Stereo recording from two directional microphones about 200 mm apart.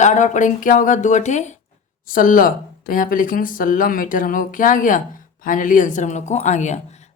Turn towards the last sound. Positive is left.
turn(degrees=35)  # may be behind; listen again after turning